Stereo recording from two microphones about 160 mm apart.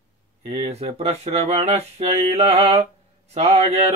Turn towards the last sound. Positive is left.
turn(degrees=-40)  # may be behind; listen again after turning